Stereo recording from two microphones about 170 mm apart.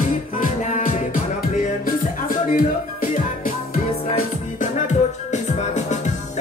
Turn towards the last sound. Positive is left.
turn(degrees=45)  # may be behind; listen again after turning